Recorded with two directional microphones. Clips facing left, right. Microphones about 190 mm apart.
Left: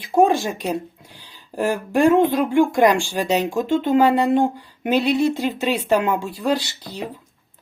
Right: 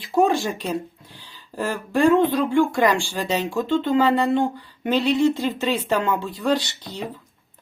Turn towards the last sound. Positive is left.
turn(degrees=10)  # may be behind; listen again after turning